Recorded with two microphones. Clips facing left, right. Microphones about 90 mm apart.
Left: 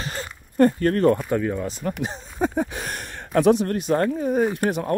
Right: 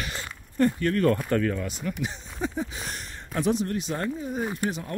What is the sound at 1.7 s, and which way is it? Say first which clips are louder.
Speech: left 4 dB; 40° left (ahead or behind).